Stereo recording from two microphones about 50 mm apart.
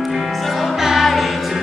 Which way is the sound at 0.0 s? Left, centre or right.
Centre.